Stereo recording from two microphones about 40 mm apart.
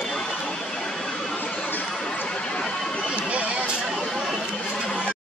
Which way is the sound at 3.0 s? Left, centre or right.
Right.